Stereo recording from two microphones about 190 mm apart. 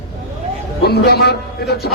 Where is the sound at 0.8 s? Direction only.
60° left (ahead or behind).